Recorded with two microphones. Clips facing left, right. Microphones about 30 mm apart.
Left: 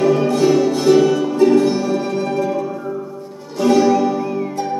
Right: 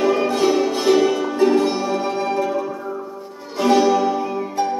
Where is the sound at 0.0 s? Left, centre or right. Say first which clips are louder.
Left 3 dB; centre.